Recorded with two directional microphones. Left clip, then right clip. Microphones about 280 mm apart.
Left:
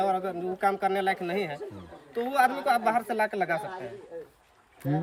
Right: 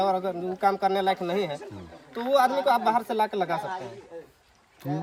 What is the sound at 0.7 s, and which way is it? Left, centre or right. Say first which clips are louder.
Speech: right 2 dB; right.